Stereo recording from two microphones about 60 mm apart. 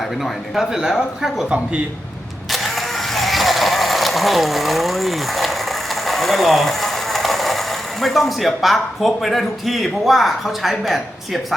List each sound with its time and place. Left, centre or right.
0.0 s speech: centre
1.5 s speech: centre
2.5 s vehicle: centre